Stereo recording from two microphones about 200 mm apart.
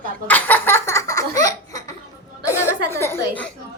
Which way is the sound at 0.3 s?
10° left (ahead or behind).